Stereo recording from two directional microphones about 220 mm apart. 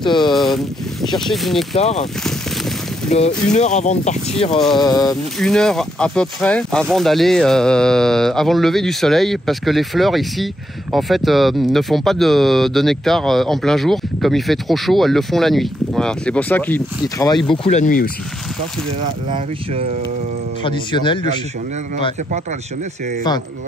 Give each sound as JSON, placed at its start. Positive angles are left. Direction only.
{"t": 0.0, "sound": "speech", "side_deg": 20}
{"t": 0.3, "sound": "speech", "side_deg": 0}
{"t": 1.8, "sound": "speech", "side_deg": 30}
{"t": 3.1, "sound": "speech", "side_deg": 30}
{"t": 4.5, "sound": "speech", "side_deg": 0}
{"t": 4.7, "sound": "a sound", "side_deg": 20}
{"t": 5.4, "sound": "speech", "side_deg": 0}
{"t": 17.5, "sound": "speech", "side_deg": 30}
{"t": 19.3, "sound": "speech", "side_deg": -25}
{"t": 20.6, "sound": "speech", "side_deg": 20}